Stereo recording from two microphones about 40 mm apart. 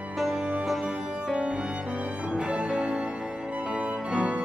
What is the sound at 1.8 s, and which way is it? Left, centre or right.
Music, right.